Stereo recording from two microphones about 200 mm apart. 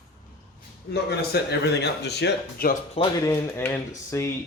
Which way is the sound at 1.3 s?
55° left (ahead or behind).